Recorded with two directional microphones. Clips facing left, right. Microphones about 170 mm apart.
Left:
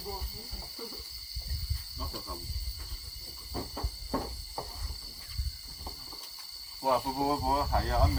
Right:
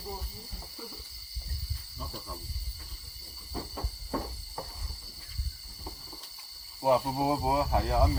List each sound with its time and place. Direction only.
6.8 s speech: 20° right (ahead or behind)